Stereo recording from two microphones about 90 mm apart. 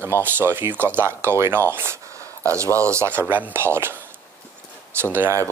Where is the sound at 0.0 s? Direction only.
25° right (ahead or behind).